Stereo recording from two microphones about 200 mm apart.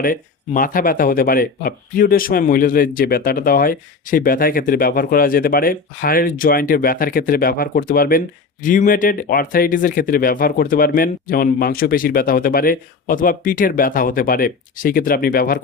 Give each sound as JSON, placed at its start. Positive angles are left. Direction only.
{"t": 0.0, "sound": "speech", "side_deg": 45}